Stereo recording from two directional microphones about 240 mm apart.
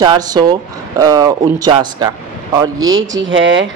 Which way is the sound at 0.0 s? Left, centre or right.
Centre.